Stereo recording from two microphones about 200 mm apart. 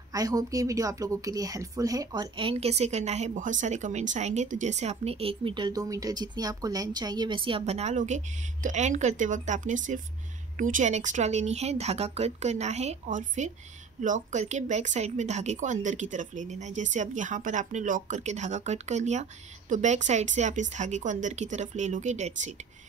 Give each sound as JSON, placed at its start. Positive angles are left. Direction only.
{"t": 0.1, "sound": "a woman's voice", "side_deg": -15}